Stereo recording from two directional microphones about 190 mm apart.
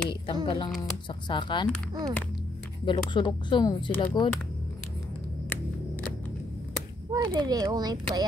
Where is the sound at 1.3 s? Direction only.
25° left (ahead or behind).